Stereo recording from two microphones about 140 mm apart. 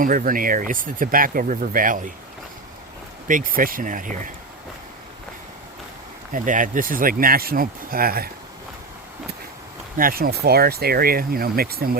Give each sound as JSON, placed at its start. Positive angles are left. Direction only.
{"t": 0.0, "sound": "speech", "side_deg": -80}
{"t": 3.2, "sound": "speech", "side_deg": -80}
{"t": 6.3, "sound": "speech", "side_deg": -70}
{"t": 10.0, "sound": "speech", "side_deg": -90}